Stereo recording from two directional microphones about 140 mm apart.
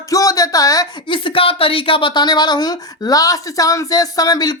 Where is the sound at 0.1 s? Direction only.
25° left (ahead or behind).